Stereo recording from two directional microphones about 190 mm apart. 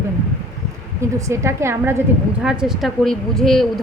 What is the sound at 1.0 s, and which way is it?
A woman's voice, 15° right (ahead or behind).